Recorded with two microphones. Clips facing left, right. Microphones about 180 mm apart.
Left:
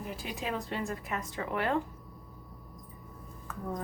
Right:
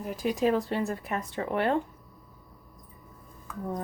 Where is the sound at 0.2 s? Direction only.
40° right (ahead or behind).